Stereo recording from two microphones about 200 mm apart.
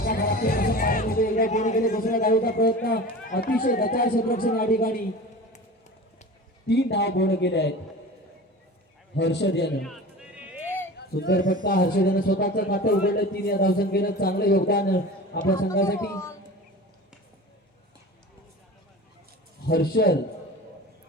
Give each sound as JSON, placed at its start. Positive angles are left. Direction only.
{"t": 0.0, "sound": "a man's voice", "side_deg": 50}
{"t": 6.7, "sound": "speech", "side_deg": 55}
{"t": 9.1, "sound": "speech", "side_deg": 60}
{"t": 9.8, "sound": "music", "side_deg": 0}
{"t": 10.9, "sound": "a man's voice", "side_deg": 55}
{"t": 16.0, "sound": "a child's voice", "side_deg": 15}
{"t": 19.6, "sound": "a man's voice", "side_deg": 50}